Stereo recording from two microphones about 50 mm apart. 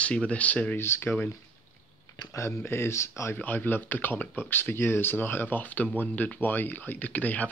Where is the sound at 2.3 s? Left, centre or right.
Left.